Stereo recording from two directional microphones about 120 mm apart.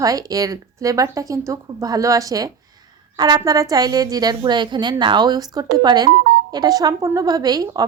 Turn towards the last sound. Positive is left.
turn(degrees=-35)  # may be behind; listen again after turning